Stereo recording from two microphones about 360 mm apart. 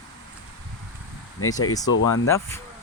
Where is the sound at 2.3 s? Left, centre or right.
Centre.